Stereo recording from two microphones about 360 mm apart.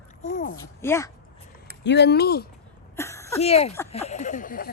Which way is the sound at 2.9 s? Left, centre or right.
Centre.